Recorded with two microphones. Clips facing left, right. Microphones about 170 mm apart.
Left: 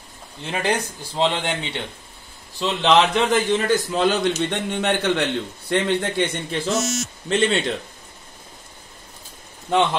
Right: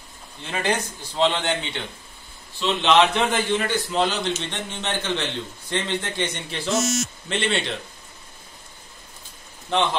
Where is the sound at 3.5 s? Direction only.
40° left (ahead or behind).